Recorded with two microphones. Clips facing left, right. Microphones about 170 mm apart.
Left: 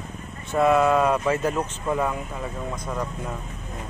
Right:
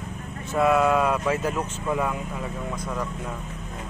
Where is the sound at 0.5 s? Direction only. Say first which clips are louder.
Left 1 dB; 5° right (ahead or behind).